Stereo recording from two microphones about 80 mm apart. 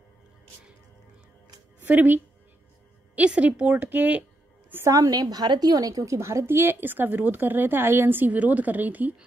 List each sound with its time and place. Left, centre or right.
1.8 s a woman's voice: centre
4.8 s a woman's voice: right